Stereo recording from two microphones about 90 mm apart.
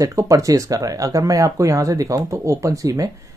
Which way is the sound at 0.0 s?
35° right (ahead or behind).